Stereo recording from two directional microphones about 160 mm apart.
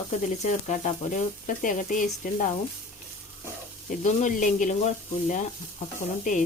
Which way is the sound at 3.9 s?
55° left (ahead or behind).